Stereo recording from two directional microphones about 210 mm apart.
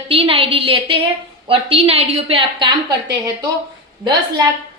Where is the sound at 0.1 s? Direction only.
25° right (ahead or behind).